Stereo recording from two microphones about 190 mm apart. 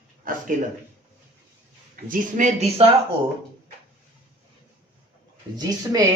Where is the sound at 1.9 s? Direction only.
45° right (ahead or behind).